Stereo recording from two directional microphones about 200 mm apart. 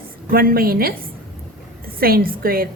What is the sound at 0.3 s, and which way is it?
Speech, 50° right (ahead or behind).